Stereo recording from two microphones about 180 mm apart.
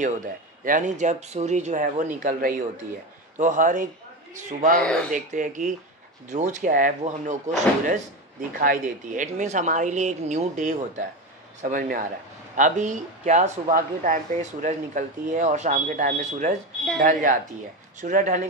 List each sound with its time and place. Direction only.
0.0 s speech: 45° right (ahead or behind)